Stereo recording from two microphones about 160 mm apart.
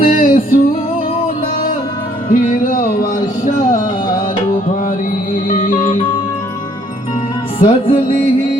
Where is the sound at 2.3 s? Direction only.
55° left (ahead or behind).